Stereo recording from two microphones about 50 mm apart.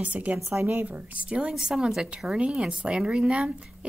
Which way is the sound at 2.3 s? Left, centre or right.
Right.